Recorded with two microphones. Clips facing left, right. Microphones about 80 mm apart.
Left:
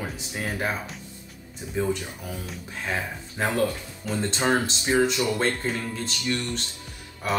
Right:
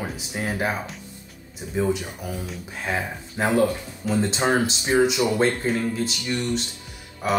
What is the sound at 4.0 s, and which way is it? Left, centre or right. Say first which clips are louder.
Speech: right 4 dB; centre.